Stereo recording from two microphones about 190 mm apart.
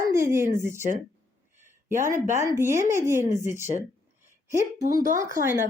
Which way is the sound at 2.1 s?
40° right (ahead or behind).